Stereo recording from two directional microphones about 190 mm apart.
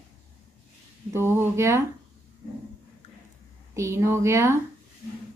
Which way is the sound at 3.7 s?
15° right (ahead or behind).